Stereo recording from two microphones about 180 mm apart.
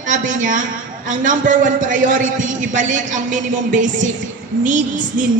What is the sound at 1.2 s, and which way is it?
A woman's voice, 45° right (ahead or behind).